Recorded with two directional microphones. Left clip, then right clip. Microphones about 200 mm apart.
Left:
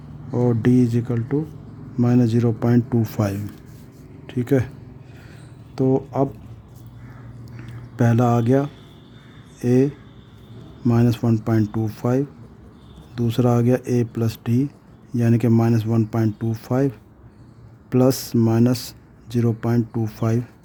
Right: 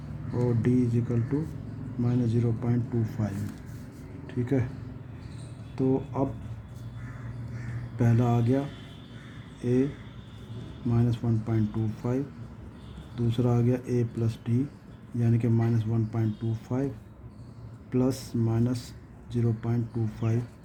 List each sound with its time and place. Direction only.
0.4 s speech: 50° left (ahead or behind)
5.7 s speech: 50° left (ahead or behind)
7.9 s speech: 50° left (ahead or behind)
10.8 s speech: 50° left (ahead or behind)
17.9 s speech: 50° left (ahead or behind)